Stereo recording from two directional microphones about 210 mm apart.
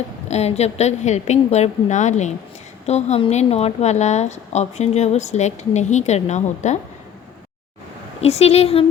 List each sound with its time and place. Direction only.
0.3 s a woman's voice: 30° left (ahead or behind)
8.2 s speech: 30° left (ahead or behind)